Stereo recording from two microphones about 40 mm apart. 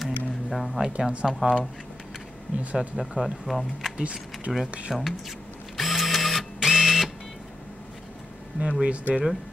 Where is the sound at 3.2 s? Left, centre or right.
Centre.